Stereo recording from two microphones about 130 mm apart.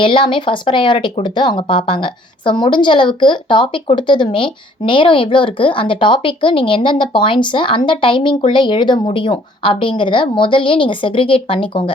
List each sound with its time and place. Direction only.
0.0 s speech: 40° left (ahead or behind)